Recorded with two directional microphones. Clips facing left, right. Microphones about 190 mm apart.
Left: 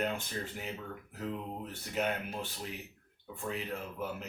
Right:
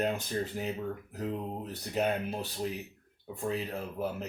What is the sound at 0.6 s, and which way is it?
Speech, 35° right (ahead or behind).